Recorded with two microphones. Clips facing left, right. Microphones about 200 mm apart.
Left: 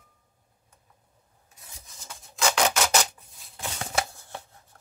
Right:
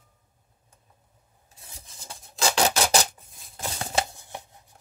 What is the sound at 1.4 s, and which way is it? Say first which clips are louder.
Rub: right 2 dB; 30° right (ahead or behind).